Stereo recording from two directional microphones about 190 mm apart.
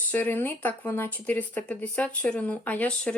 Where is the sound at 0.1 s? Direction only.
10° left (ahead or behind).